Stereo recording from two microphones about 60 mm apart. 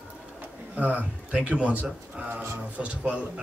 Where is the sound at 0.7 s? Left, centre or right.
Right.